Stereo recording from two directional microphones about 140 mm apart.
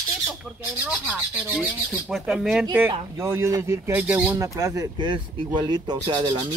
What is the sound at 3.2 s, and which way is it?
Speech, 20° right (ahead or behind).